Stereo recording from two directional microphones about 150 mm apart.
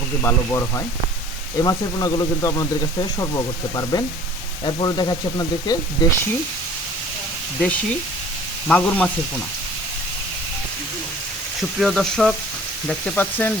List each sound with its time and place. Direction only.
0.2 s speech: 15° left (ahead or behind)
8.6 s speech: 10° left (ahead or behind)
11.8 s speech: centre (ahead or behind)